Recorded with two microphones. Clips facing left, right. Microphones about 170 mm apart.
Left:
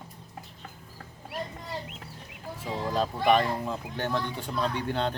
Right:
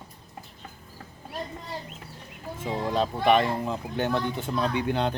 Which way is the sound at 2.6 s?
20° right (ahead or behind).